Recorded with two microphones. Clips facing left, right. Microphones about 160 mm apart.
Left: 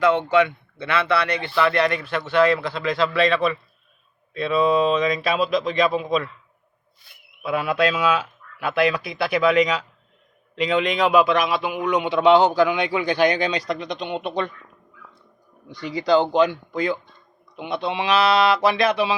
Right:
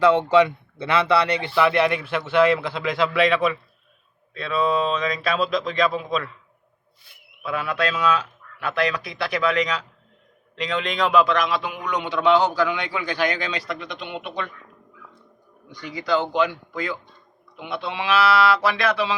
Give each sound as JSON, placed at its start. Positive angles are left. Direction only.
{"t": 1.5, "sound": "a man's voice", "side_deg": -10}
{"t": 3.2, "sound": "speech", "side_deg": -5}
{"t": 7.4, "sound": "a man's voice", "side_deg": 10}
{"t": 15.8, "sound": "speech", "side_deg": 25}
{"t": 16.5, "sound": "speech", "side_deg": 20}